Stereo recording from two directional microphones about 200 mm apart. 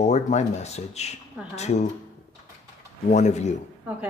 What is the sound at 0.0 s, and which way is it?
Speech, 35° left (ahead or behind).